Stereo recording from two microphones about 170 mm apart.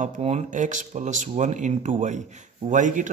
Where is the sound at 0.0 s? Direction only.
45° right (ahead or behind).